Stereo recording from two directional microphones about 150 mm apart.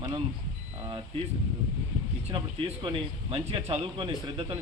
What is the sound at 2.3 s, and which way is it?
Speech, 35° right (ahead or behind).